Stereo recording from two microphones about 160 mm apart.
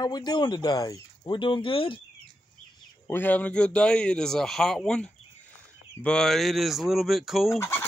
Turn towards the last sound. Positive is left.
turn(degrees=15)  # may be behind; listen again after turning